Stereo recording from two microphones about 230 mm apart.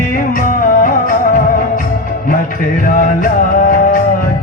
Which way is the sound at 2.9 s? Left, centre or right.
Left.